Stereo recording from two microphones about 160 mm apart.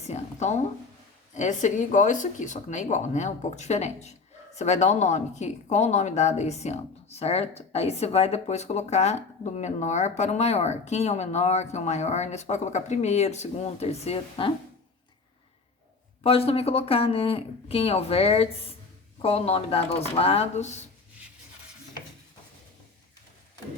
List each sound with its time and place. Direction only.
0.0 s speech: 45° left (ahead or behind)
16.2 s speech: 35° left (ahead or behind)